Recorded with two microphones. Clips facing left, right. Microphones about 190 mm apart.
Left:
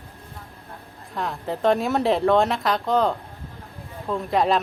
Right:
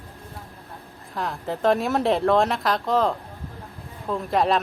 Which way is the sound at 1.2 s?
Centre (ahead or behind).